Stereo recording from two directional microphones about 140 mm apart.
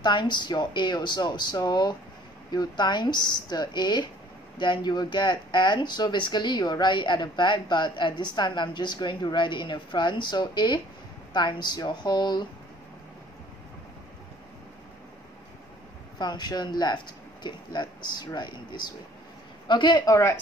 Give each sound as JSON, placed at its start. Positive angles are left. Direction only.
{"t": 0.0, "sound": "speech", "side_deg": 35}
{"t": 16.2, "sound": "speech", "side_deg": 30}